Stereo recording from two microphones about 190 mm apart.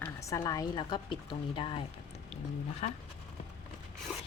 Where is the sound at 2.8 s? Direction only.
40° left (ahead or behind).